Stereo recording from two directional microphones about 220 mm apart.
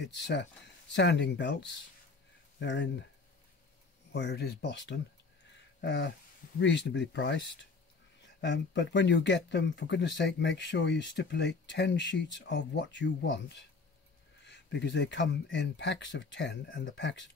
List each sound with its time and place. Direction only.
0.9 s speech: 50° left (ahead or behind)
4.1 s speech: 50° left (ahead or behind)
5.8 s a sound: 50° left (ahead or behind)
6.6 s speech: 50° left (ahead or behind)
14.4 s speech: 50° left (ahead or behind)